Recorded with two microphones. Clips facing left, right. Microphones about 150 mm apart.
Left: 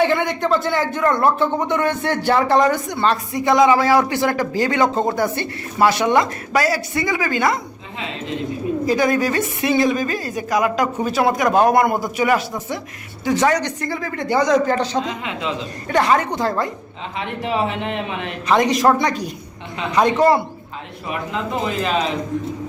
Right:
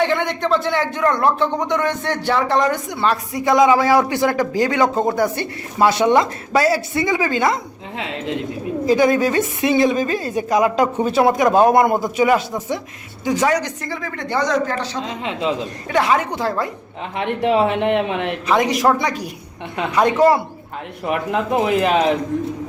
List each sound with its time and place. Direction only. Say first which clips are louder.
0.0 s speech: left 1 dB; 5° left (ahead or behind); by 7.6 s 25° right (ahead or behind)
8.9 s speech: right 4 dB; 20° right (ahead or behind); by 14.8 s 10° left (ahead or behind)
15.0 s speech: right 3 dB; 30° right (ahead or behind)
15.9 s speech: left 1 dB; 5° right (ahead or behind)
17.2 s speech: right 5 dB; 60° right (ahead or behind)
18.4 s speech: left 2 dB; 5° right (ahead or behind)
21.0 s speech: right 5 dB; 65° right (ahead or behind)